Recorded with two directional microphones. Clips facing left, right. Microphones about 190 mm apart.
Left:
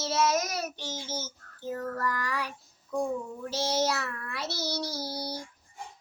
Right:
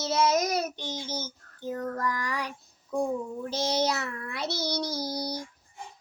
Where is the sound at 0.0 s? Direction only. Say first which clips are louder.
Right 2 dB; 20° right (ahead or behind).